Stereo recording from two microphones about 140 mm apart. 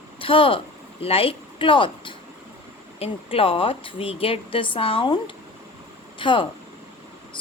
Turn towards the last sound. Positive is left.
turn(degrees=35)  # may be behind; listen again after turning